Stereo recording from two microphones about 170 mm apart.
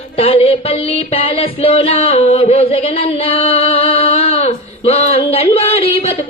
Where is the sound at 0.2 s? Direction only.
35° left (ahead or behind).